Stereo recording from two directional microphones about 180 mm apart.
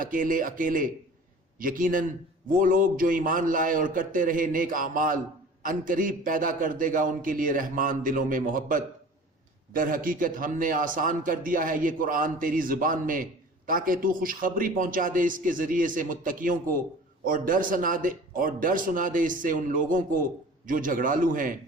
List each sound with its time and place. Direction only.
0.0 s a man's voice: 50° right (ahead or behind)